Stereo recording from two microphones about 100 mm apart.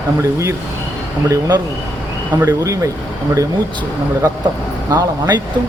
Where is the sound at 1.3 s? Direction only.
40° right (ahead or behind).